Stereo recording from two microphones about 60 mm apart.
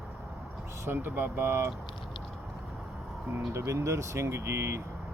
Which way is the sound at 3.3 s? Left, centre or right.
Right.